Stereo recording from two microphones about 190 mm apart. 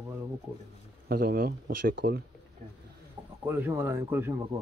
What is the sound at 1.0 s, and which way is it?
Speech, 50° right (ahead or behind).